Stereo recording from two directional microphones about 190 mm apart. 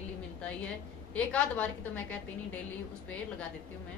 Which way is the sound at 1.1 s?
5° left (ahead or behind).